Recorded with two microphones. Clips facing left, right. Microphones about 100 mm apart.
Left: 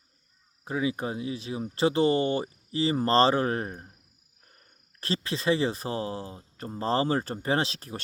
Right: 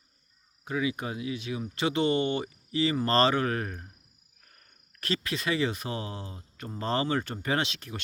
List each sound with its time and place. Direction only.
0.6 s speech: 35° left (ahead or behind)
4.9 s speech: 30° left (ahead or behind)